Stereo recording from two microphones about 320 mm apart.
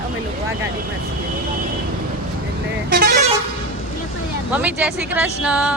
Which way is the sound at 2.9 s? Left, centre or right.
Right.